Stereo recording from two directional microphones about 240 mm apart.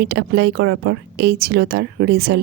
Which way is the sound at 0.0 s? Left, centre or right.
Right.